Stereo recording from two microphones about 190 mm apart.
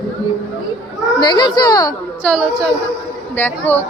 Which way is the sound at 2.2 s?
5° left (ahead or behind).